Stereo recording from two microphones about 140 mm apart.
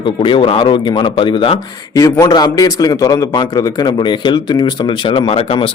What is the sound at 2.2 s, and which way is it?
A man's voice, 25° left (ahead or behind).